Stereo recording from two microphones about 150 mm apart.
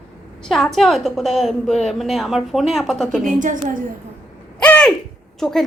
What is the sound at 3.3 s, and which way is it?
Speech, 60° right (ahead or behind).